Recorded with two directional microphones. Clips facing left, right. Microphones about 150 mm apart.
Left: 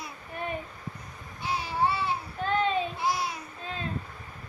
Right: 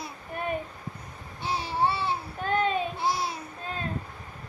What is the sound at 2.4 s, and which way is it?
Child singing, 50° right (ahead or behind).